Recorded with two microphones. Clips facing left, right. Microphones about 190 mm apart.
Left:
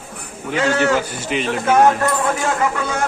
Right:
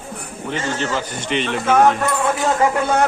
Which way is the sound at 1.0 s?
5° left (ahead or behind).